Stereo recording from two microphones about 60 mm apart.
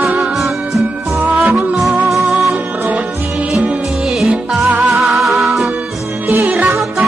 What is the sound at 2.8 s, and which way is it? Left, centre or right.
Music, right.